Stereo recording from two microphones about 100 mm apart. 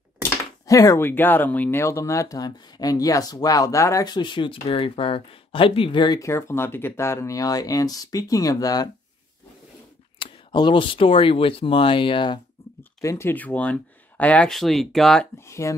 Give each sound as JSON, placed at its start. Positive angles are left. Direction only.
{"t": 0.2, "sound": "a sound", "side_deg": 35}
{"t": 1.0, "sound": "speech", "side_deg": 20}
{"t": 4.6, "sound": "speech", "side_deg": 65}
{"t": 6.1, "sound": "speech", "side_deg": 30}
{"t": 10.1, "sound": "speech", "side_deg": 55}
{"t": 13.0, "sound": "speech", "side_deg": 30}
{"t": 13.3, "sound": "speech", "side_deg": 15}
{"t": 14.5, "sound": "speech", "side_deg": 0}
{"t": 15.4, "sound": "speech", "side_deg": 30}